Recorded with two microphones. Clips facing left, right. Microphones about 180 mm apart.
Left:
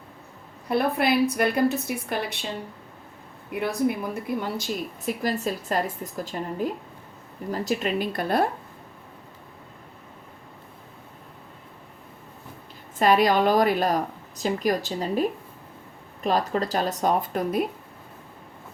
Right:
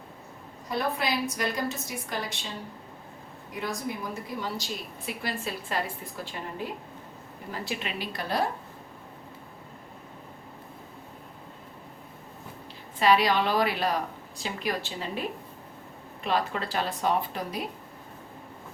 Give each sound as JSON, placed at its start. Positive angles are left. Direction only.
{"t": 0.7, "sound": "a woman's voice", "side_deg": 60}
{"t": 3.5, "sound": "a woman's voice", "side_deg": 60}
{"t": 5.0, "sound": "a woman's voice", "side_deg": 40}
{"t": 13.0, "sound": "a woman's voice", "side_deg": 45}